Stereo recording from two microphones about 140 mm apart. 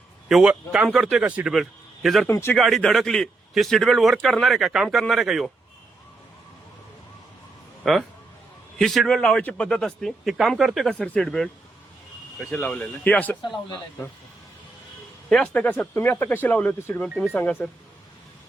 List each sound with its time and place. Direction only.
0.3 s a man's voice: 5° right (ahead or behind)
2.2 s speech: 15° left (ahead or behind)
2.6 s a man's voice: centre (ahead or behind)
7.9 s a man's voice: centre (ahead or behind)
15.3 s speech: 5° left (ahead or behind)